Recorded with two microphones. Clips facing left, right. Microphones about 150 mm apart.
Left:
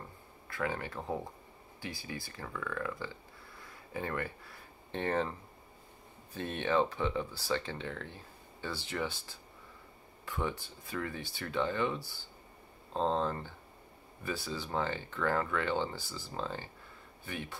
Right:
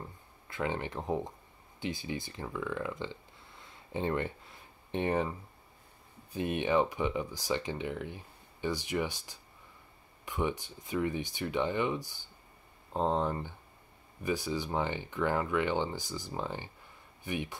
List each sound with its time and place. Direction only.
0.5 s speech: 20° right (ahead or behind)
6.3 s speech: 15° right (ahead or behind)